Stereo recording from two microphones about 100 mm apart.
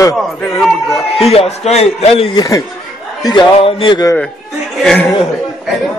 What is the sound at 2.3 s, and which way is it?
Speech, 40° left (ahead or behind).